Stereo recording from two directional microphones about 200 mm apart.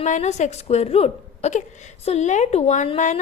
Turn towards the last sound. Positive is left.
turn(degrees=35)  # may be behind; listen again after turning